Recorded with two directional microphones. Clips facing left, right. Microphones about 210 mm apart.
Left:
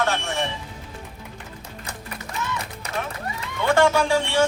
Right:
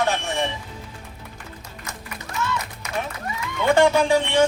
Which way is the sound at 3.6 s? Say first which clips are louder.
Right 2 dB; 15° right (ahead or behind).